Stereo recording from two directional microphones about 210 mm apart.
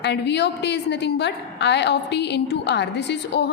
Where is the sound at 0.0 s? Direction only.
55° left (ahead or behind).